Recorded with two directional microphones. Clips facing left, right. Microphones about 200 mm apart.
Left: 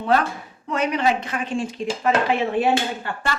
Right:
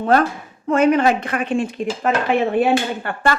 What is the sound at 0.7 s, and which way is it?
Speech, 50° right (ahead or behind).